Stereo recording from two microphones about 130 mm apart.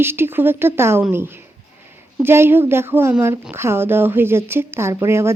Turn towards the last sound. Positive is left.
turn(degrees=-20)  # may be behind; listen again after turning